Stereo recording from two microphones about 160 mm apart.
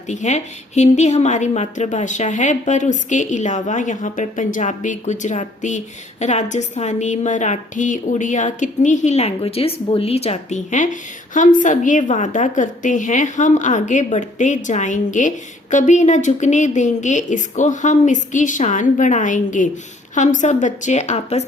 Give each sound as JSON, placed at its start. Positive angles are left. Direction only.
{"t": 0.1, "sound": "a woman's voice", "side_deg": 45}